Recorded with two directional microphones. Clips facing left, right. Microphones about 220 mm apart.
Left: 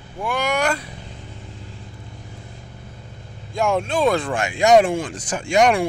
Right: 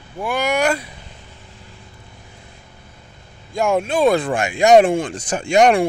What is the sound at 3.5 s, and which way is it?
Speech, 5° right (ahead or behind).